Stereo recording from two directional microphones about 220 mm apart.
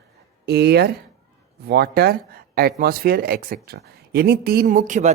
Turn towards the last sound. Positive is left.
turn(degrees=-35)  # may be behind; listen again after turning